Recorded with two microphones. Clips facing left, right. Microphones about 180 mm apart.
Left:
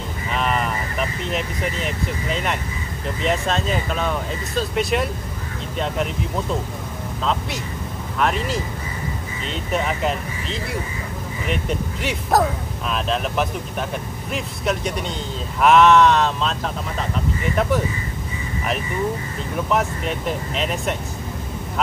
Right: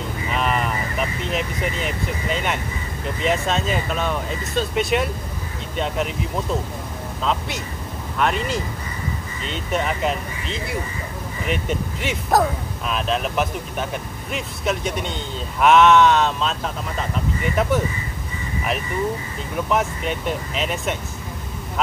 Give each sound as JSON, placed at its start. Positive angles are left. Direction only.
{"t": 0.3, "sound": "speech", "side_deg": 0}
{"t": 7.2, "sound": "speech", "side_deg": 0}
{"t": 19.7, "sound": "speech", "side_deg": 0}